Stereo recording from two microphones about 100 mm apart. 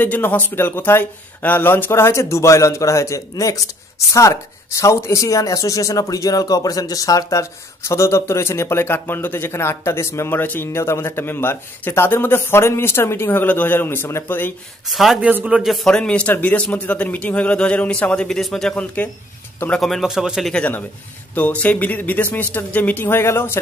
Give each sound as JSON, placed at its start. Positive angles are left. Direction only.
{"t": 0.0, "sound": "speech", "side_deg": 20}
{"t": 14.9, "sound": "a man's voice", "side_deg": 0}
{"t": 15.2, "sound": "a man's voice", "side_deg": -15}
{"t": 15.6, "sound": "a man's voice", "side_deg": 0}
{"t": 20.5, "sound": "speech", "side_deg": 15}